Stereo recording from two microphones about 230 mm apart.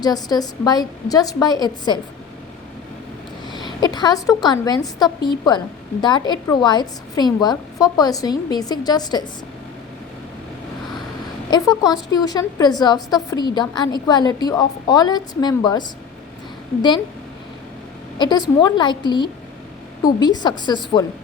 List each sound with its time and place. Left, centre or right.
0.0 s a woman's voice: centre
3.5 s a woman's voice: centre
11.5 s a woman's voice: centre
18.2 s a woman's voice: centre